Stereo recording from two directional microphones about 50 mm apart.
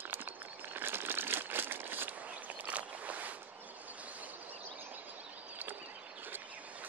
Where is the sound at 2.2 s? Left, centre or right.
Right.